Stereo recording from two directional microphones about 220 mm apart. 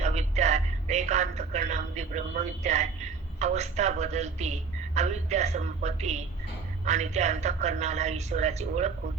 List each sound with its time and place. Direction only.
0.0 s a woman's voice: 30° right (ahead or behind)